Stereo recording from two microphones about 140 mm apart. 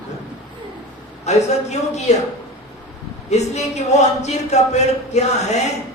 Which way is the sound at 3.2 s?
55° left (ahead or behind).